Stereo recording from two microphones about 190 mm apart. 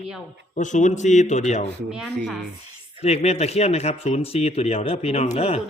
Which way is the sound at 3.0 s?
35° left (ahead or behind).